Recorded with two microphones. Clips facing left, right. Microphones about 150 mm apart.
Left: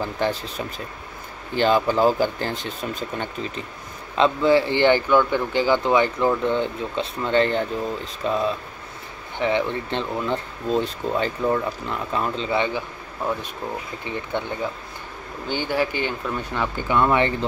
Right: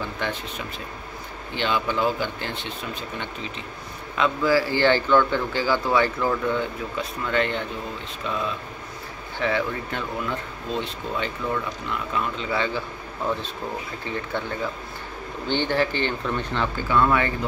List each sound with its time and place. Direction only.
0.0 s speech: 35° left (ahead or behind)
4.2 s speech: 25° left (ahead or behind)
9.4 s speech: 20° left (ahead or behind)
10.7 s speech: 40° left (ahead or behind); by 14.4 s 15° left (ahead or behind)
15.4 s speech: 10° left (ahead or behind)